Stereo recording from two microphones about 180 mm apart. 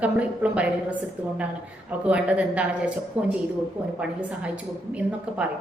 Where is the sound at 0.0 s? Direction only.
5° right (ahead or behind).